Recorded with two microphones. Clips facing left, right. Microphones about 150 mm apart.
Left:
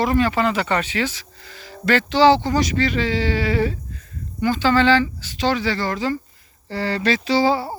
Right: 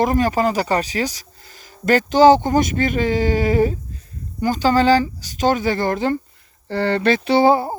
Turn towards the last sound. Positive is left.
turn(degrees=-50)  # may be behind; listen again after turning